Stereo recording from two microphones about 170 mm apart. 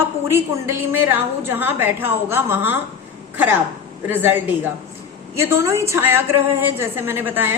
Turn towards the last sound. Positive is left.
turn(degrees=-10)  # may be behind; listen again after turning